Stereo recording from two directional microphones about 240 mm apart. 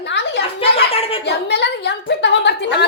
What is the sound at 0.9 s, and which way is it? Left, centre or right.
Speech, left.